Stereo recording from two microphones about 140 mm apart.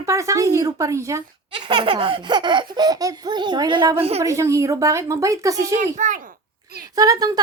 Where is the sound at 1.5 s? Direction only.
35° right (ahead or behind).